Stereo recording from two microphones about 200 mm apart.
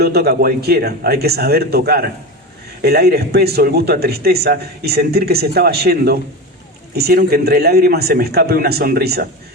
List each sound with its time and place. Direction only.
0.0 s speech: 50° right (ahead or behind)